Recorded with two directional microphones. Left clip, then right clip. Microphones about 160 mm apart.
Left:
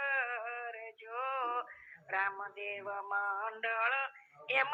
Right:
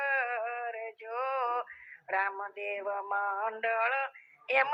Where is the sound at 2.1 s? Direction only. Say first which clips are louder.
Right 4 dB; 45° right (ahead or behind).